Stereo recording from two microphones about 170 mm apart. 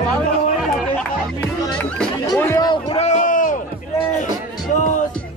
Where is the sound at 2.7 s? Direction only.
40° left (ahead or behind).